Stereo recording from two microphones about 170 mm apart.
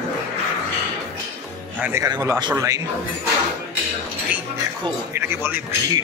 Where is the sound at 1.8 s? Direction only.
15° right (ahead or behind).